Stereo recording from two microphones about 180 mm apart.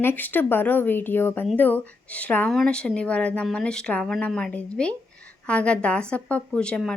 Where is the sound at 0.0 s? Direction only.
10° left (ahead or behind).